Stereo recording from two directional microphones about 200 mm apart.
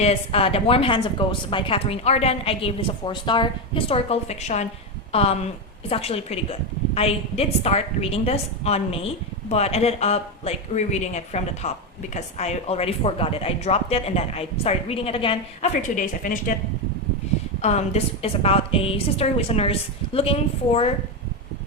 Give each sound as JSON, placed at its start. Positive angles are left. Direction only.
{"t": 0.0, "sound": "a woman's voice", "side_deg": 30}
{"t": 15.8, "sound": "a woman's voice", "side_deg": 40}
{"t": 17.6, "sound": "a woman's voice", "side_deg": 35}